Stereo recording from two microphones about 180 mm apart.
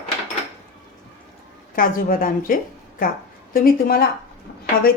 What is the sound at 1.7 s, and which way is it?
A woman's voice, 50° left (ahead or behind).